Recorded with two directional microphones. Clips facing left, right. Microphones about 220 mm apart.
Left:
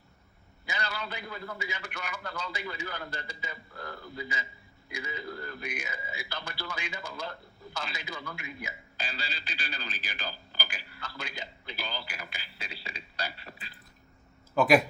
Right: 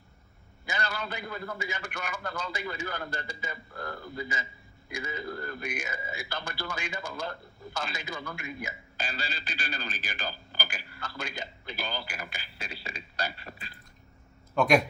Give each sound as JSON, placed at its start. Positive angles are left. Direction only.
{"t": 0.6, "sound": "speech", "side_deg": -45}
{"t": 14.5, "sound": "speech", "side_deg": 5}